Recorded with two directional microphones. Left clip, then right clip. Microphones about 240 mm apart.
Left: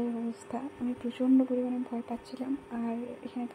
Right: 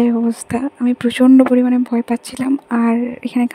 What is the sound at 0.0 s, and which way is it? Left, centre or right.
Speech, right.